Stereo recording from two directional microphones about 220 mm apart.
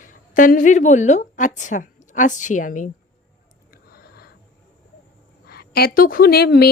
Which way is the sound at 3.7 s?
45° left (ahead or behind).